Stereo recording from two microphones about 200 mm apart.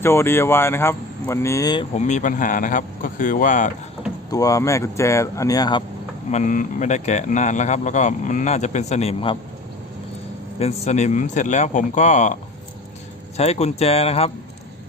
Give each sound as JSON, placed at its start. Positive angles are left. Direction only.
{"t": 0.0, "sound": "speech", "side_deg": 10}
{"t": 1.9, "sound": "a man's voice", "side_deg": 35}
{"t": 4.3, "sound": "speech", "side_deg": 15}
{"t": 6.3, "sound": "a man's voice", "side_deg": 40}
{"t": 10.6, "sound": "a man's voice", "side_deg": 30}